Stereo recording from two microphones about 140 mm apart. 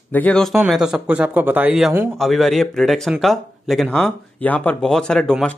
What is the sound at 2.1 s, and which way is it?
Speech, centre (ahead or behind).